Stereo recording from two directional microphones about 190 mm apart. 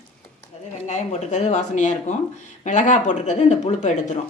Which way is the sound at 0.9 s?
35° left (ahead or behind).